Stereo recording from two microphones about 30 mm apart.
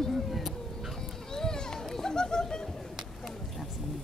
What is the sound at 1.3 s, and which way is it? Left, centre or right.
Children playing, centre.